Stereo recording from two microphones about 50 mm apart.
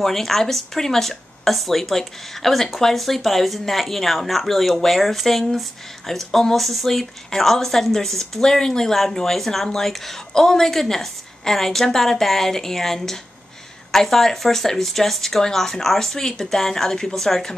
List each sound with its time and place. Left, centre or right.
0.0 s speech: centre